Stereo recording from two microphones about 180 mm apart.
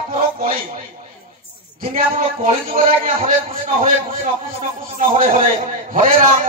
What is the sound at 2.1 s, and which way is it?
Speech, 45° right (ahead or behind).